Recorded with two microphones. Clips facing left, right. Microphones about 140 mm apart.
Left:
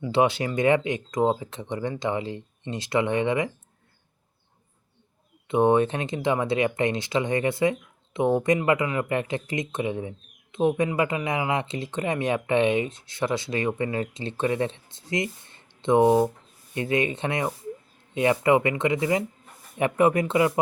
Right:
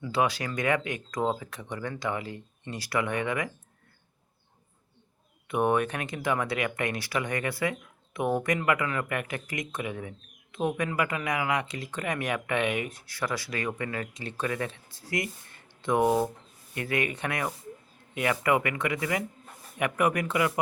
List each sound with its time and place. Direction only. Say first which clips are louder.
0.0 s speech: left 5 dB; 25° left (ahead or behind)
5.5 s speech: left 6 dB; 25° left (ahead or behind)